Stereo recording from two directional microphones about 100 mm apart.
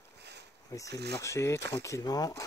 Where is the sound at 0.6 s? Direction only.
35° left (ahead or behind).